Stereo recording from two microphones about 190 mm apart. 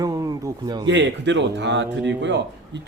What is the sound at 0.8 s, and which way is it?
A man's voice, 70° right (ahead or behind).